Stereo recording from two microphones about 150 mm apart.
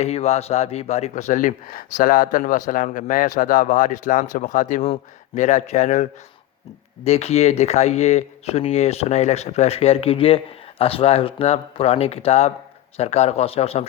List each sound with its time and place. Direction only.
0.0 s speech: 45° left (ahead or behind)